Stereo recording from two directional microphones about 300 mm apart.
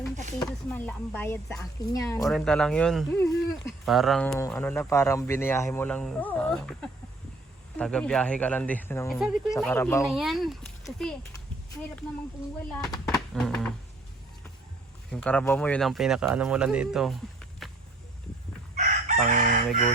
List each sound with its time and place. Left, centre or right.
0.3 s speech: centre
13.1 s a sound: centre
15.1 s speech: centre
18.8 s chicken: right